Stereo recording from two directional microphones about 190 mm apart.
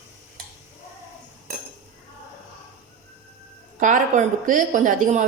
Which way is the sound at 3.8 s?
40° right (ahead or behind).